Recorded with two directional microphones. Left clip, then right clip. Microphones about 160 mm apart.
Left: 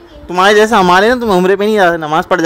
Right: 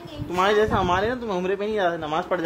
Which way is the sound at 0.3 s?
65° left (ahead or behind).